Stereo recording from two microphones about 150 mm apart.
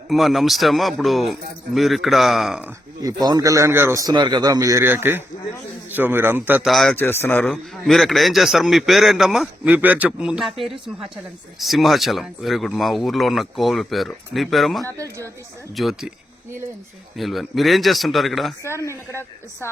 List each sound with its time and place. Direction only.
0.1 s a man's voice: centre (ahead or behind)
3.0 s a man's voice: 25° right (ahead or behind)
6.7 s a man's voice: centre (ahead or behind)
6.9 s a man's voice: 15° left (ahead or behind)
14.8 s a man's voice: 20° right (ahead or behind)
15.7 s a man's voice: centre (ahead or behind)
17.2 s a man's voice: centre (ahead or behind)
18.6 s speech: 20° left (ahead or behind)